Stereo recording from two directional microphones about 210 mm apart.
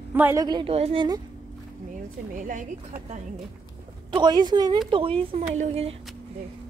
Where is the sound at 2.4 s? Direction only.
40° right (ahead or behind).